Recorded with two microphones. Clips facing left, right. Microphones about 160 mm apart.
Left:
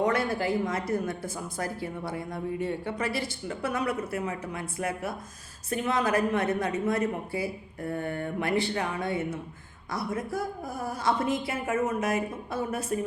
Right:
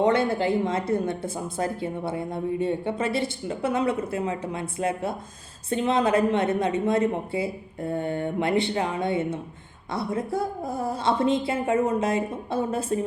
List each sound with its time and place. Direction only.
0.0 s speech: 25° right (ahead or behind)